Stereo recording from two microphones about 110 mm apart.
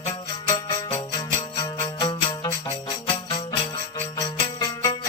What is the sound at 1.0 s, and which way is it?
Music, 45° left (ahead or behind).